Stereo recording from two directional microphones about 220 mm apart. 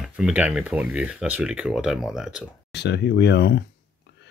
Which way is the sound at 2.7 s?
50° left (ahead or behind).